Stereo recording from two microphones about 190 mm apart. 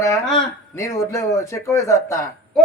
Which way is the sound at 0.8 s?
15° left (ahead or behind).